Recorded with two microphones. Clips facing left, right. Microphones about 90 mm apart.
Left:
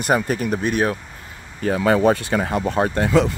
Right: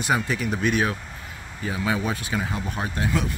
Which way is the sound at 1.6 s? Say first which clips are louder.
Left 10 dB; 60° left (ahead or behind).